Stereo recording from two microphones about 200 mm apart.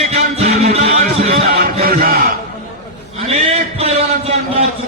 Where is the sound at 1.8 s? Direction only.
50° right (ahead or behind).